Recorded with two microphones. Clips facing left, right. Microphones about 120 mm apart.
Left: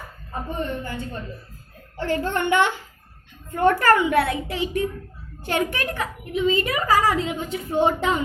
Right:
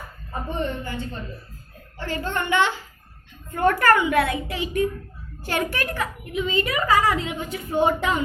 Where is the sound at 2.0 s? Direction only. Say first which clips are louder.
Left 4 dB; 55° left (ahead or behind).